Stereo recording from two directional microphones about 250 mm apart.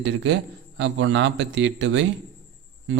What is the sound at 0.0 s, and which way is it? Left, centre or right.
Speech, right.